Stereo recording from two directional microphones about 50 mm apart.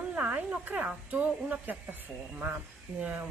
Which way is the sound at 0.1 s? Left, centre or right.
Right.